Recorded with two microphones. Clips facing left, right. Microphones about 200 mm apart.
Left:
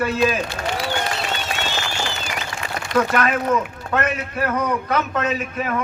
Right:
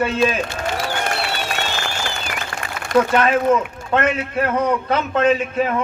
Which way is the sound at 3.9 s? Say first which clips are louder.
Right 4 dB; 30° right (ahead or behind).